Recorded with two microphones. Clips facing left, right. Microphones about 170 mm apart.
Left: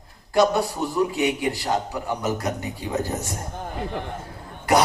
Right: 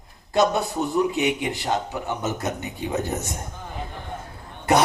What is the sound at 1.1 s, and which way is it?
Speech, 20° right (ahead or behind).